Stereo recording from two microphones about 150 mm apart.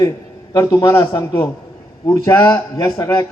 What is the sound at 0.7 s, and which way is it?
A man's voice, 25° left (ahead or behind).